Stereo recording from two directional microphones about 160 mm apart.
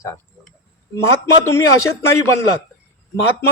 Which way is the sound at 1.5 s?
15° left (ahead or behind).